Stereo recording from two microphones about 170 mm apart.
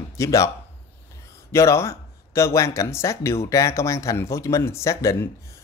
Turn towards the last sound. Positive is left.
turn(degrees=15)  # may be behind; listen again after turning